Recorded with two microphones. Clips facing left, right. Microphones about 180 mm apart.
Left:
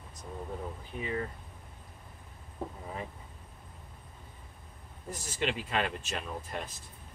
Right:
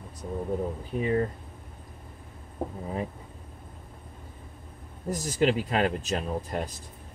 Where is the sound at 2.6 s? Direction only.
50° right (ahead or behind).